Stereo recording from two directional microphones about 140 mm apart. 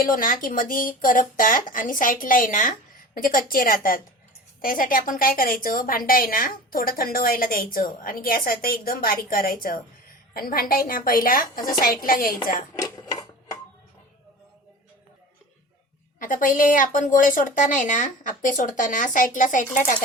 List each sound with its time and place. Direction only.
0.0 s speech: 80° left
3.2 s a woman's voice: 85° left
12.7 s a sound: 25° left (ahead or behind)
16.1 s speech: 75° left (ahead or behind)